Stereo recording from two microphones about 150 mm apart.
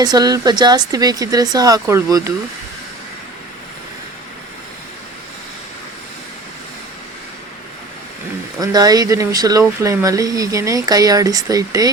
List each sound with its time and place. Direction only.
0.0 s speech: 25° right (ahead or behind)
8.5 s speech: 25° right (ahead or behind)